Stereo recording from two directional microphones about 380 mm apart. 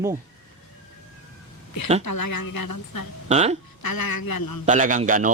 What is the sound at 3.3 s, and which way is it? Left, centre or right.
Speech, centre.